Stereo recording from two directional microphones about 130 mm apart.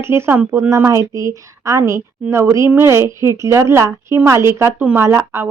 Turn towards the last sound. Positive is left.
turn(degrees=-20)  # may be behind; listen again after turning